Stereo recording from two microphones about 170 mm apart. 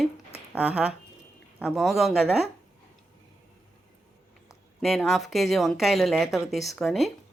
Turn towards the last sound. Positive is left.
turn(degrees=0)  # may be behind; listen again after turning